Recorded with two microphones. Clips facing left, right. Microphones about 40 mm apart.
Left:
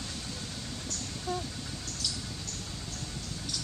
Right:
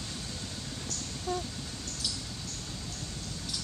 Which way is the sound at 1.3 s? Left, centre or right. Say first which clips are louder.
Right 1 dB; centre.